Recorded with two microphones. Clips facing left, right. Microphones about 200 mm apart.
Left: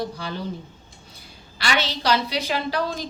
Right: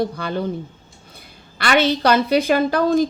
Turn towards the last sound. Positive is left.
turn(degrees=-50)  # may be behind; listen again after turning